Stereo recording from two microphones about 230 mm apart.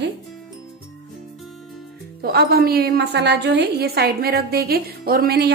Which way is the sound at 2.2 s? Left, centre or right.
Right.